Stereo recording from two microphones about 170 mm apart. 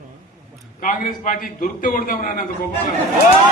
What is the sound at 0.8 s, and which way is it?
A man's voice, 50° left (ahead or behind).